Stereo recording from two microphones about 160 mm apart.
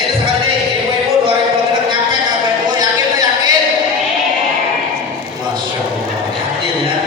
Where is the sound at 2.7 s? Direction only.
25° right (ahead or behind).